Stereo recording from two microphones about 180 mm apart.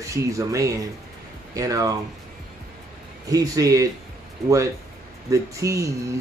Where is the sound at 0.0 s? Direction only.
15° right (ahead or behind).